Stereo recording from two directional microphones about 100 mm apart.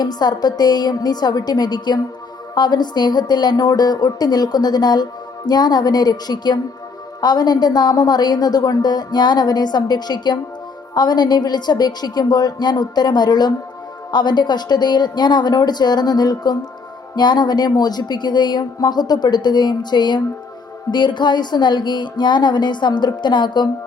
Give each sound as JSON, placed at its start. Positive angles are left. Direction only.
{"t": 0.0, "sound": "a woman's voice", "side_deg": 45}